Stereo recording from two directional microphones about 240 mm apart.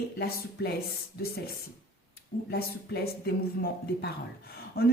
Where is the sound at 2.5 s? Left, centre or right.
Left.